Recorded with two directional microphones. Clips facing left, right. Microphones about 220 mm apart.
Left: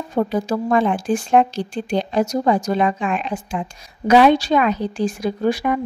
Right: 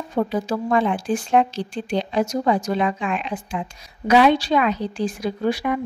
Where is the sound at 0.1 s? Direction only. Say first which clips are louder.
Left 2 dB; 45° left (ahead or behind).